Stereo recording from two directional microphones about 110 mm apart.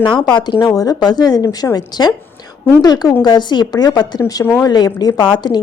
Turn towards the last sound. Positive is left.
turn(degrees=40)  # may be behind; listen again after turning